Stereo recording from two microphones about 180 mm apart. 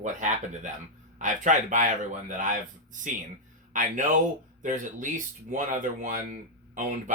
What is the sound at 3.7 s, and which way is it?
Speech, 45° right (ahead or behind).